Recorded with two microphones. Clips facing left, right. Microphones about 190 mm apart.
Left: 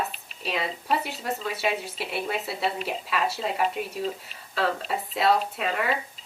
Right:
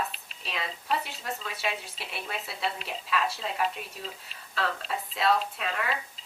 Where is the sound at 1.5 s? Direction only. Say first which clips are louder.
Left 7 dB; 5° left (ahead or behind).